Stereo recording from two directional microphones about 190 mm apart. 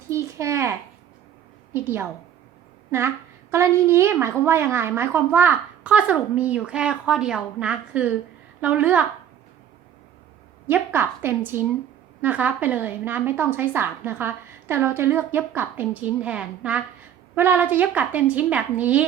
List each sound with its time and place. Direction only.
0.1 s a sound: 15° right (ahead or behind)
1.7 s a woman's voice: 10° right (ahead or behind)
3.5 s a woman's voice: 15° right (ahead or behind)
10.7 s a woman's voice: 10° right (ahead or behind)